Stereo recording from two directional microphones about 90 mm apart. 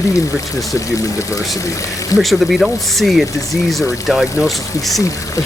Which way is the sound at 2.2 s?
Centre (ahead or behind).